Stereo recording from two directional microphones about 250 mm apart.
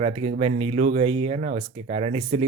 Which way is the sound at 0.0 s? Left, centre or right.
Right.